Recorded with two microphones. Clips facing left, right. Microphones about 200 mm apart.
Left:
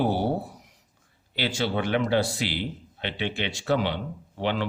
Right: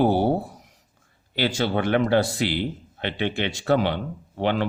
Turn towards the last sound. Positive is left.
turn(degrees=-50)  # may be behind; listen again after turning